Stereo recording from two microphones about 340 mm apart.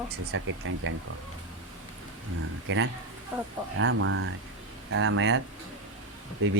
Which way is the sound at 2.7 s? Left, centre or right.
Right.